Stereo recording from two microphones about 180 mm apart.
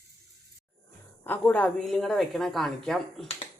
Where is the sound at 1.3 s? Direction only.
10° left (ahead or behind).